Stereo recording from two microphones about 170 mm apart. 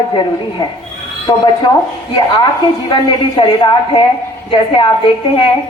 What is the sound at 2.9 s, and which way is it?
A woman's voice, 25° left (ahead or behind).